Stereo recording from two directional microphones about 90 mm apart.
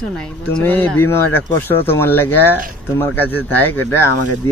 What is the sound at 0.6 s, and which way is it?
Speech, 20° left (ahead or behind).